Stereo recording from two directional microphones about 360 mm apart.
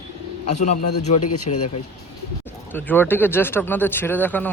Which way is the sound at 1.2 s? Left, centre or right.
Left.